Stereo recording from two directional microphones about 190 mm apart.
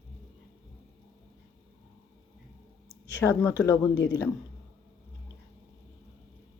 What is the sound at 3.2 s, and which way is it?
Speech, 15° left (ahead or behind).